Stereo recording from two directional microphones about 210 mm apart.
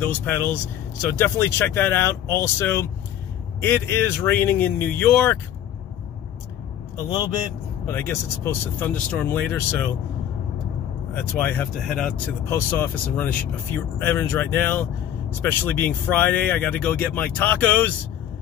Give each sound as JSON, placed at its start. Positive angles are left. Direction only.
{"t": 0.0, "sound": "speech", "side_deg": 10}
{"t": 7.0, "sound": "speech", "side_deg": 20}
{"t": 11.1, "sound": "speech", "side_deg": 10}